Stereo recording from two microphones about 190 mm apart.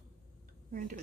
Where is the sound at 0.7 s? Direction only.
45° right (ahead or behind).